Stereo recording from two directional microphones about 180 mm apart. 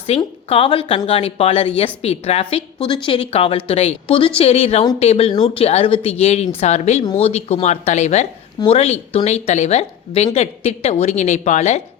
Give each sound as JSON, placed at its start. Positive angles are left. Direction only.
{"t": 0.2, "sound": "a woman's voice", "side_deg": 30}